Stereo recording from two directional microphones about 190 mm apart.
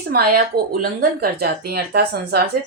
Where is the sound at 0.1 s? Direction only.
50° right (ahead or behind).